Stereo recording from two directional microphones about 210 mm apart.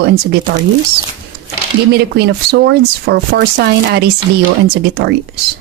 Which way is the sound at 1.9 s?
50° right (ahead or behind).